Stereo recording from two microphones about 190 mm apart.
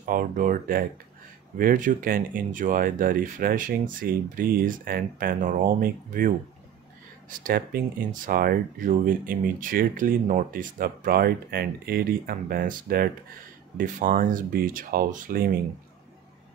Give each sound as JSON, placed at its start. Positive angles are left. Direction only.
{"t": 0.0, "sound": "speech", "side_deg": -45}